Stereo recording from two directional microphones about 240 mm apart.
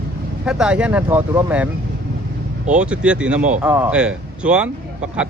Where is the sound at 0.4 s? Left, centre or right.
Centre.